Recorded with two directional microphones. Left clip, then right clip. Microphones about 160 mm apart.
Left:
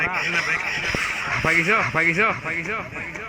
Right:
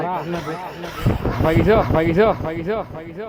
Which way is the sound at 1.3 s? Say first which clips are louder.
Right 3 dB; 55° right (ahead or behind).